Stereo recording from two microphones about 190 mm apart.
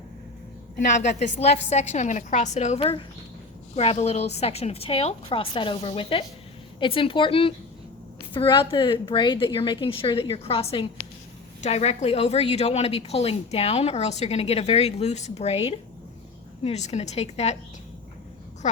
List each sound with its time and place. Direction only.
1.4 s a woman's voice: 35° left (ahead or behind)